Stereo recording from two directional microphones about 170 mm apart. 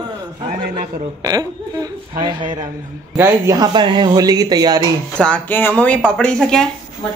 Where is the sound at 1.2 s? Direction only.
20° right (ahead or behind).